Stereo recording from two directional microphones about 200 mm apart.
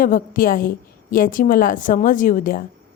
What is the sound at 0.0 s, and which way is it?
A woman's voice, 45° left (ahead or behind).